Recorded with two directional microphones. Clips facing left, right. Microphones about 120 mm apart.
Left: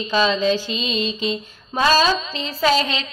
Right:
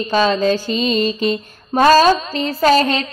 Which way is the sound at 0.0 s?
50° right (ahead or behind).